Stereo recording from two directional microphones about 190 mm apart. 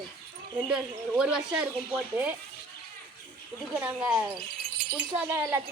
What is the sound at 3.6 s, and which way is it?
A woman's voice, 5° right (ahead or behind).